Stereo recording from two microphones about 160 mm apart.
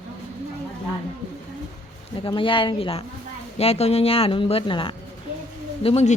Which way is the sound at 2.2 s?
35° left (ahead or behind).